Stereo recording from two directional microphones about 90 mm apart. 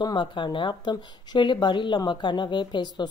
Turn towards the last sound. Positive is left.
turn(degrees=55)  # may be behind; listen again after turning